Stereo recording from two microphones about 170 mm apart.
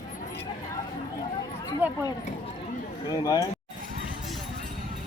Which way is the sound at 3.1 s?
25° left (ahead or behind).